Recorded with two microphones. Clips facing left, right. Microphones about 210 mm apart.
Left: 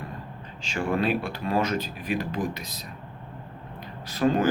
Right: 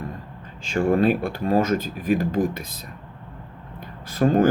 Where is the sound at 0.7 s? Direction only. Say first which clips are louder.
Right 6 dB; 50° right (ahead or behind).